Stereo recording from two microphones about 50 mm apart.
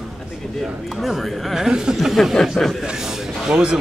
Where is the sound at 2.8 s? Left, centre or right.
Centre.